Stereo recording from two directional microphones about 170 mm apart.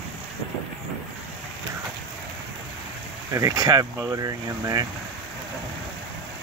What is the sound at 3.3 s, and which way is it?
Speech, 20° right (ahead or behind).